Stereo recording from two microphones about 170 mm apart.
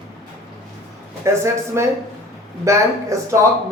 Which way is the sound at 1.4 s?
15° right (ahead or behind).